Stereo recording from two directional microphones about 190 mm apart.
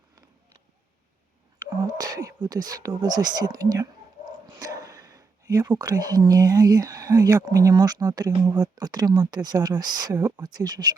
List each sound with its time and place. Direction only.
2.0 s speech: 20° right (ahead or behind)